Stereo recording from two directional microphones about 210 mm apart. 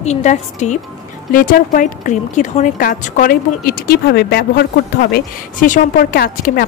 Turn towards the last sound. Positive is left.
turn(degrees=45)  # may be behind; listen again after turning